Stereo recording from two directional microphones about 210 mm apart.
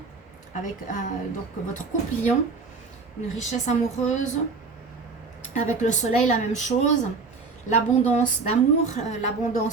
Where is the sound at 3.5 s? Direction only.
35° left (ahead or behind).